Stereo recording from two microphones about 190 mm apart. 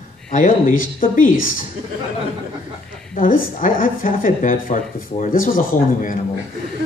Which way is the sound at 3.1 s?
45° left (ahead or behind).